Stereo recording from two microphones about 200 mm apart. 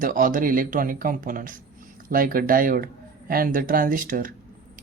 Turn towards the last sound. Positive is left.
turn(degrees=-45)  # may be behind; listen again after turning